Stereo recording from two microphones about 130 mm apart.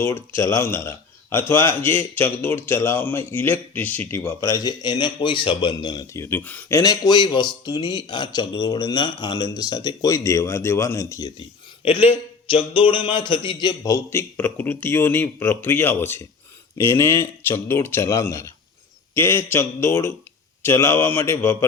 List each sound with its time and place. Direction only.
0.0 s speech: 20° left (ahead or behind)
6.2 s speech: 15° left (ahead or behind)
11.9 s a man's voice: 45° left (ahead or behind); by 21.7 s 20° left (ahead or behind)